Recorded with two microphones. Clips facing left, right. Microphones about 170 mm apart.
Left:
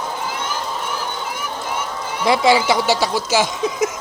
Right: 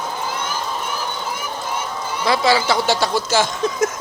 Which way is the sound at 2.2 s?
20° left (ahead or behind).